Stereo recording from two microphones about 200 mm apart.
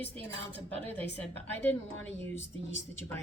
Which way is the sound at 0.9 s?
10° left (ahead or behind).